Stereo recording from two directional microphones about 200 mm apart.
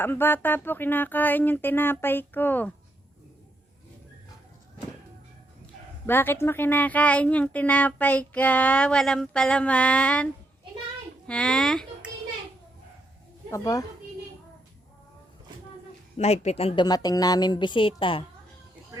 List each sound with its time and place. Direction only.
0.0 s a woman's voice: 10° left (ahead or behind)
6.1 s a woman's voice: 10° left (ahead or behind)
11.3 s speech: 5° left (ahead or behind)
13.5 s a woman's voice: 15° left (ahead or behind)
16.1 s a woman's voice: 30° left (ahead or behind)